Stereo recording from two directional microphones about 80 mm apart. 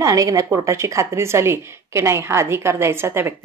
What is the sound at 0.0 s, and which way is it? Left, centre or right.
A woman's voice, right.